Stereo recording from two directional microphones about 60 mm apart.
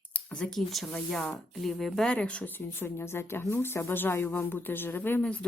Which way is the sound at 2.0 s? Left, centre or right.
Centre.